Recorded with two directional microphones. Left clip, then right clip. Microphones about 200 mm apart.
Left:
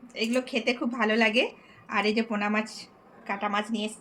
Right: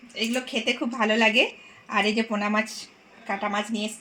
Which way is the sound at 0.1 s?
25° right (ahead or behind).